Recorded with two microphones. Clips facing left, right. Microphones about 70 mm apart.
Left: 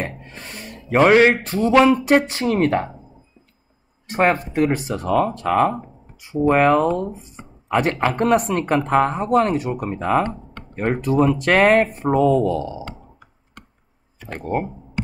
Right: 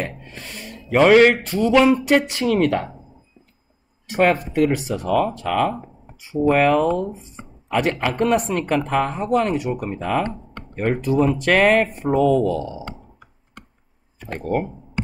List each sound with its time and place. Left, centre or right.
0.0 s speech: left
4.1 s speech: left
11.1 s speech: left